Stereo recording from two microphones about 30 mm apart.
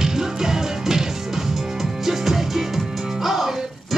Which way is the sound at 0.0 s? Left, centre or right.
Centre.